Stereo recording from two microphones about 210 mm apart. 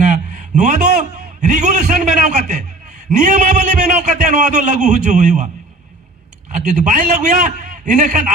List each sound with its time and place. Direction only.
0.0 s a man's voice: 35° right (ahead or behind)
6.7 s a man's voice: 35° right (ahead or behind)